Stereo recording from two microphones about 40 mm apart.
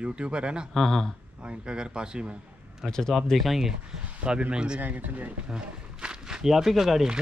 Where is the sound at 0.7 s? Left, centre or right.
Centre.